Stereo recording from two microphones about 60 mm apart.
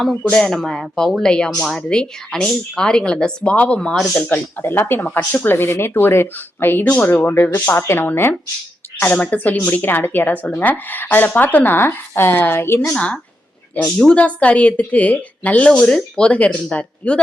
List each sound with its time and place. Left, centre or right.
0.0 s speech: centre
0.3 s speech: centre
4.6 s speech: left
9.1 s speech: left
12.9 s speech: centre